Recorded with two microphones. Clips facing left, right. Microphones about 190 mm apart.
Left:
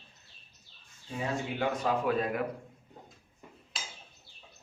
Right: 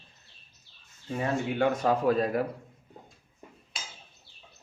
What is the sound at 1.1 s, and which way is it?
Speech, 50° right (ahead or behind).